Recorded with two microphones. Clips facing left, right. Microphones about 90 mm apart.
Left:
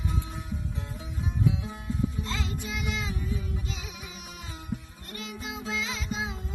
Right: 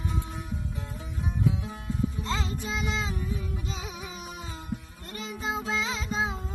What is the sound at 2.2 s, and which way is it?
Music, 35° right (ahead or behind).